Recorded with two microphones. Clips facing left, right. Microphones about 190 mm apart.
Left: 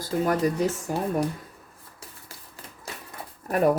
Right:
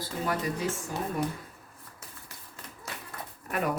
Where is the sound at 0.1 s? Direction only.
60° left (ahead or behind).